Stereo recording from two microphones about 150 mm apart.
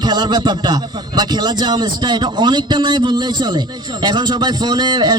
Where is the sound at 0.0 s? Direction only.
30° right (ahead or behind).